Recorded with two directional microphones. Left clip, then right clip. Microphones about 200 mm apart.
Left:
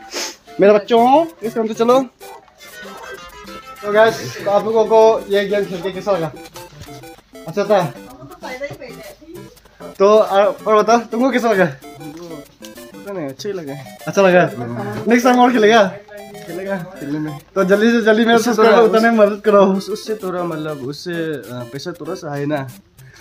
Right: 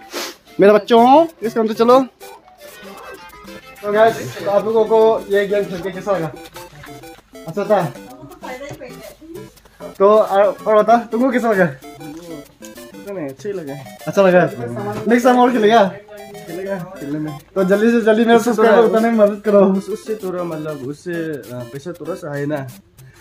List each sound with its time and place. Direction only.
0.1 s music: 15° right (ahead or behind)
1.5 s speech: 25° right (ahead or behind)
3.8 s speech: centre (ahead or behind)
7.4 s speech: centre (ahead or behind)
9.8 s speech: centre (ahead or behind)
13.1 s music: 15° left (ahead or behind)
14.1 s speech: 10° right (ahead or behind)
14.5 s speech: centre (ahead or behind)
16.3 s music: centre (ahead or behind)
16.7 s speech: centre (ahead or behind)
20.9 s speech: 20° left (ahead or behind)
21.4 s speech: centre (ahead or behind)
22.2 s speech: 15° left (ahead or behind)